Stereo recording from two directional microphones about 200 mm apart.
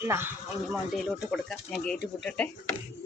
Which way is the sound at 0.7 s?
Centre (ahead or behind).